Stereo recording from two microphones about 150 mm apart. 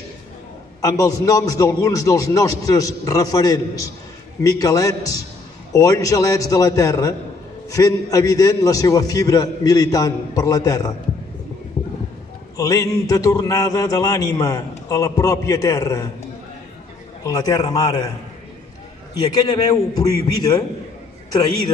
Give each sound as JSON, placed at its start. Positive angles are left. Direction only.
{"t": 0.7, "sound": "a man's voice", "side_deg": 20}
{"t": 11.8, "sound": "a sound", "side_deg": 20}
{"t": 12.5, "sound": "a man's voice", "side_deg": 25}
{"t": 17.2, "sound": "a man's voice", "side_deg": 25}
{"t": 19.2, "sound": "a man's voice", "side_deg": 25}